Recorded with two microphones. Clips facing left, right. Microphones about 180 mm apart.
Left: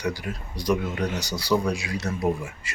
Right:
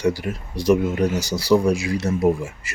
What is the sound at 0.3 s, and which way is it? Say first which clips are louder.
Speech: right 7 dB; 25° right (ahead or behind).